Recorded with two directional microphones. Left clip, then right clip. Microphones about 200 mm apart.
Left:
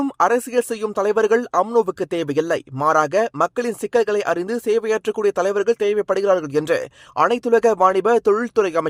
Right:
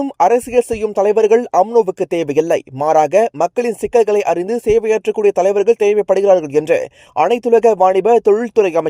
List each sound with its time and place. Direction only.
0.2 s speech: centre (ahead or behind)
1.7 s speech: 15° left (ahead or behind)
2.0 s speech: centre (ahead or behind)